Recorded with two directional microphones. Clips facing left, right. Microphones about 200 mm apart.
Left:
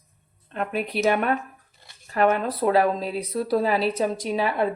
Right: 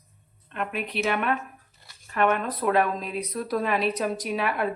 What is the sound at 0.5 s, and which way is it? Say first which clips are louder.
A woman's voice: left 4 dB; 35° left (ahead or behind).